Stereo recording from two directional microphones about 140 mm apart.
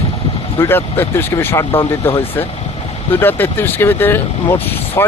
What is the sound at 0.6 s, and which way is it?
Speech, 15° left (ahead or behind).